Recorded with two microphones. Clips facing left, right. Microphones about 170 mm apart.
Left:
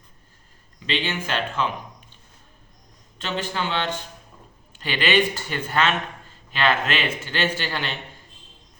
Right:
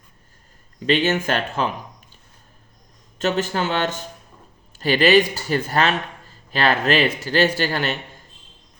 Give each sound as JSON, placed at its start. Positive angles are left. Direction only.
{"t": 0.9, "sound": "speech", "side_deg": -45}
{"t": 3.2, "sound": "a man's voice", "side_deg": -45}